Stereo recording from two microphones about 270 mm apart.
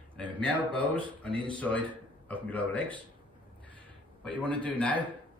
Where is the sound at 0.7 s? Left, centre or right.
Centre.